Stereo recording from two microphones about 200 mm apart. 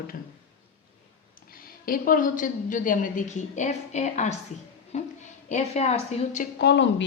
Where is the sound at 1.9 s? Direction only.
45° left (ahead or behind).